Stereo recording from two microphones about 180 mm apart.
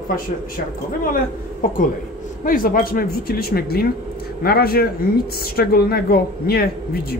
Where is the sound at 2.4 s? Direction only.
50° left (ahead or behind).